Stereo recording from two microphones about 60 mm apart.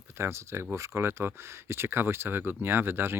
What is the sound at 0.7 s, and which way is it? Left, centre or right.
Speech, right.